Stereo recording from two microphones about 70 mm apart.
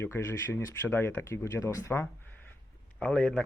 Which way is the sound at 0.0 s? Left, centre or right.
Left.